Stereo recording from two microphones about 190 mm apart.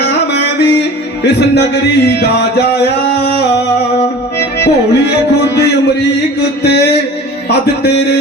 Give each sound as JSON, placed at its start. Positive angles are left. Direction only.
{"t": 0.0, "sound": "music", "side_deg": 60}